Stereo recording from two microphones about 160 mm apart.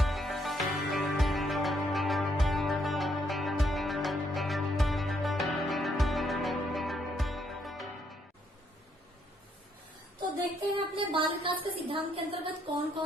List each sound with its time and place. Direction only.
0.0 s music: centre (ahead or behind)
10.8 s a sound: 30° right (ahead or behind)
11.6 s a woman's voice: 35° right (ahead or behind)